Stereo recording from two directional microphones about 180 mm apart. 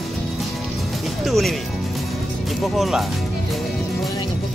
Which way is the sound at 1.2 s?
Centre (ahead or behind).